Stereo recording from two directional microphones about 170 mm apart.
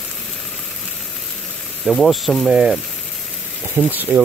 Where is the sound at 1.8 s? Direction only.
Centre (ahead or behind).